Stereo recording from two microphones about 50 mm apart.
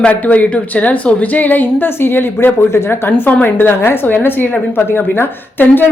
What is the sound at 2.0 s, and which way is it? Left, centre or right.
Speech, left.